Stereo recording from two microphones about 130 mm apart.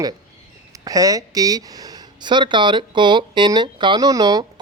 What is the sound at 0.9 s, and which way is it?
A man's voice, 25° right (ahead or behind).